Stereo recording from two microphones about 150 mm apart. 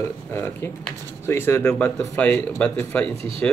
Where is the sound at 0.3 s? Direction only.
15° left (ahead or behind).